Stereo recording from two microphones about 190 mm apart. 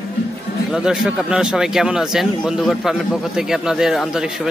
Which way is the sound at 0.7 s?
5° right (ahead or behind).